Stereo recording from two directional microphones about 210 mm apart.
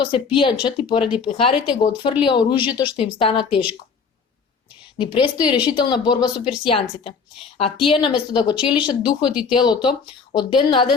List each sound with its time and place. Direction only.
0.0 s speech: 25° left (ahead or behind)
4.9 s speech: 25° left (ahead or behind)